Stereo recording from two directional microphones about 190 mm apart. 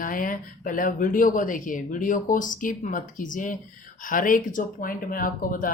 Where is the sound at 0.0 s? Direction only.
45° left (ahead or behind).